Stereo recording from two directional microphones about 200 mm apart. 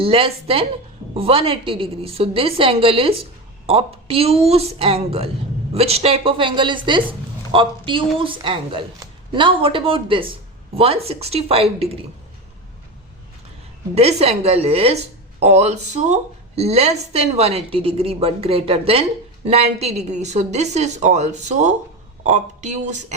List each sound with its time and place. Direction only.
0.0 s a woman's voice: 30° right (ahead or behind)
13.9 s a woman's voice: 30° right (ahead or behind)